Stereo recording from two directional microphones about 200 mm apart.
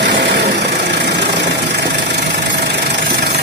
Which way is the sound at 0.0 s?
60° right (ahead or behind).